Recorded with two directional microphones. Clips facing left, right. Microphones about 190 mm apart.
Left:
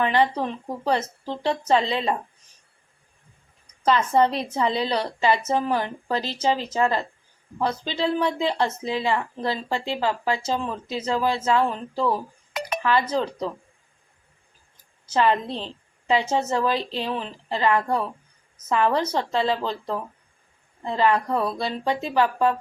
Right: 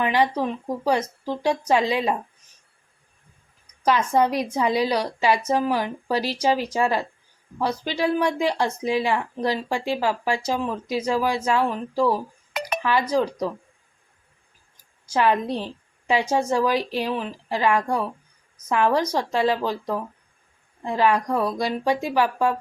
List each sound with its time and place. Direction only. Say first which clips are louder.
0.0 s speech: even; 10° right (ahead or behind)
3.8 s speech: even; 10° right (ahead or behind)
15.0 s speech: even; 10° right (ahead or behind)